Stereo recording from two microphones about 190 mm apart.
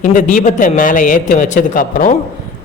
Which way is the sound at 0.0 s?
45° left (ahead or behind).